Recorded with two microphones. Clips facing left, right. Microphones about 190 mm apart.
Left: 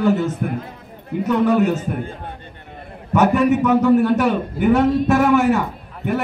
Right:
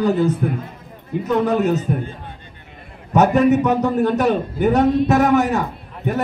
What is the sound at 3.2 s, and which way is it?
A man's voice, 40° right (ahead or behind).